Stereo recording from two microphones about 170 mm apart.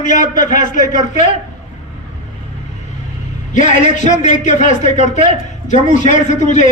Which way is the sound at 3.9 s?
45° left (ahead or behind).